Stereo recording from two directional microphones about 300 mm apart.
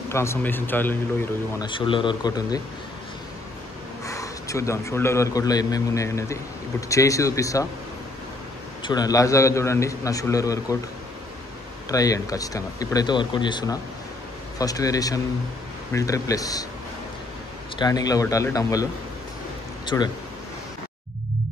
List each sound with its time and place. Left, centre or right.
0.1 s a man's voice: centre
4.0 s a man's voice: centre
8.8 s a man's voice: centre
11.9 s a man's voice: centre
17.7 s a man's voice: centre
19.9 s a man's voice: centre